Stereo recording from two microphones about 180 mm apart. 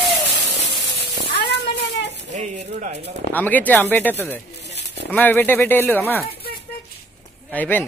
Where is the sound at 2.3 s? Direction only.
40° right (ahead or behind).